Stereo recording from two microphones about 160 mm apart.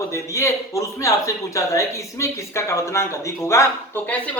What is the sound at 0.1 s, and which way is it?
A man's voice, 20° left (ahead or behind).